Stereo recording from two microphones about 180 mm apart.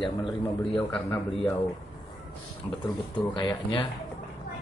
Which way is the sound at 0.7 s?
10° left (ahead or behind).